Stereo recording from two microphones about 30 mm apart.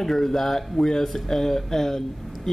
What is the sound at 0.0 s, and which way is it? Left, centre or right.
Speech, centre.